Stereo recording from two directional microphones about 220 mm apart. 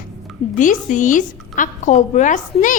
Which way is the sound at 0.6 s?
35° left (ahead or behind).